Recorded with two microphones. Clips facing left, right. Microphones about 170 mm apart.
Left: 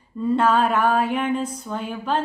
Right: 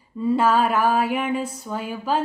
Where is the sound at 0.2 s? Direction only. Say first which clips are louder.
Even; 5° right (ahead or behind).